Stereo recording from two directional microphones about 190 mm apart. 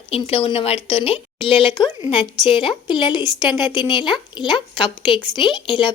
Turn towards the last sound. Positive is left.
turn(degrees=25)  # may be behind; listen again after turning